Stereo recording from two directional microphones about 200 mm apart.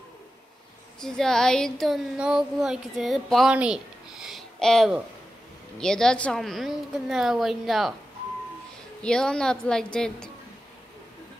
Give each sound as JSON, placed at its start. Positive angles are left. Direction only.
{"t": 1.0, "sound": "speech", "side_deg": 5}
{"t": 9.0, "sound": "speech", "side_deg": 5}